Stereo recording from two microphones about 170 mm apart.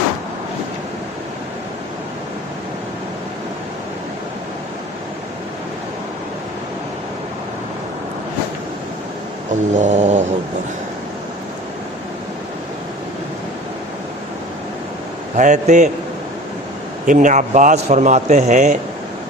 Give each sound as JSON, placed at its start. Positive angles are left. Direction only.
{"t": 9.7, "sound": "cat", "side_deg": -45}
{"t": 15.4, "sound": "a man's voice", "side_deg": -45}
{"t": 17.1, "sound": "a man's voice", "side_deg": -50}